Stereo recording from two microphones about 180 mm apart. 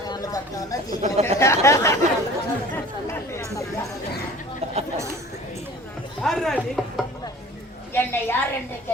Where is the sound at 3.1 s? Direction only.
15° left (ahead or behind).